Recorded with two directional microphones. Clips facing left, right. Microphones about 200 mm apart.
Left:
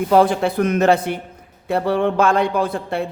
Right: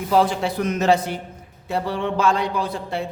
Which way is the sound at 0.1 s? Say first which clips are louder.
Left 3 dB; 55° left (ahead or behind).